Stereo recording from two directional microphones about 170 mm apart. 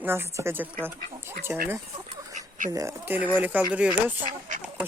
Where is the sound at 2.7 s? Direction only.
20° right (ahead or behind).